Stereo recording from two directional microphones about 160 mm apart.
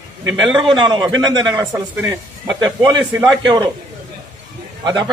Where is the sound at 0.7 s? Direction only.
30° right (ahead or behind).